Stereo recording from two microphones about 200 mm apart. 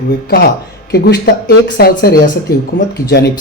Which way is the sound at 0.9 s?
55° left (ahead or behind).